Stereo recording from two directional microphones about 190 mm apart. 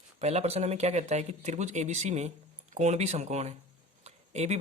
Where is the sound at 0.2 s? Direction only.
35° right (ahead or behind).